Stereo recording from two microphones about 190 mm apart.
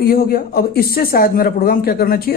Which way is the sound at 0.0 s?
50° left (ahead or behind).